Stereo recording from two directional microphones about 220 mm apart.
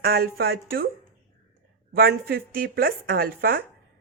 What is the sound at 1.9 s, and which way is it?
A woman's voice, 45° right (ahead or behind).